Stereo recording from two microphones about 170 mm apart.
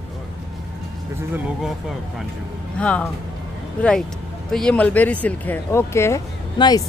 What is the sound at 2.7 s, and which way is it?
Speech, 5° left (ahead or behind).